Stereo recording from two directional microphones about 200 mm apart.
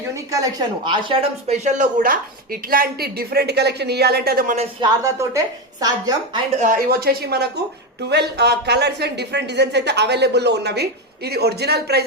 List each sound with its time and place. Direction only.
0.1 s speech: 15° right (ahead or behind); by 4.5 s 50° right (ahead or behind)
5.0 s a woman's voice: 15° right (ahead or behind)
6.6 s a woman's voice: 45° right (ahead or behind)